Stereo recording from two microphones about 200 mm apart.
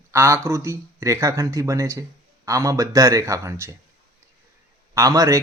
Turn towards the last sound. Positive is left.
turn(degrees=-15)  # may be behind; listen again after turning